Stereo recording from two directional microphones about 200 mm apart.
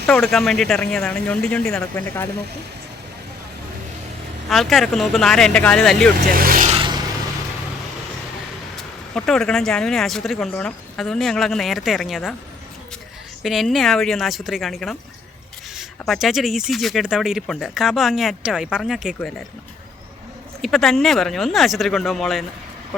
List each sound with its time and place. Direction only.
0.1 s speech: centre (ahead or behind)
4.4 s speech: centre (ahead or behind)
6.3 s speech: 45° right (ahead or behind)
6.7 s vehicle: 25° right (ahead or behind)
9.1 s speech: centre (ahead or behind)
13.4 s speech: centre (ahead or behind)
20.6 s speech: centre (ahead or behind)